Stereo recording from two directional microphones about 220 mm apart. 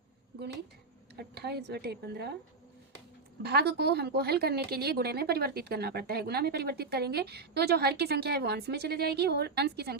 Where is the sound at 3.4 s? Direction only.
45° right (ahead or behind).